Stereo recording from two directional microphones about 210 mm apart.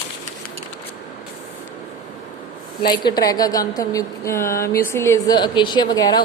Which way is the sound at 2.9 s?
20° left (ahead or behind).